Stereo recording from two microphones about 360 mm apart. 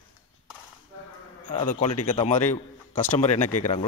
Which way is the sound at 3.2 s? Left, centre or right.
Centre.